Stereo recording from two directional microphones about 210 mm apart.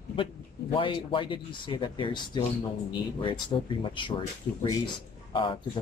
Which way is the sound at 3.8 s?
25° left (ahead or behind).